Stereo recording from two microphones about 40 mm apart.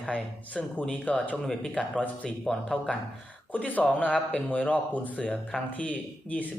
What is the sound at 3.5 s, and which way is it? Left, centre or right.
Speech, left.